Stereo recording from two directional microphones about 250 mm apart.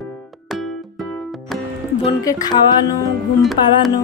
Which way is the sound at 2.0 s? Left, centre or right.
Centre.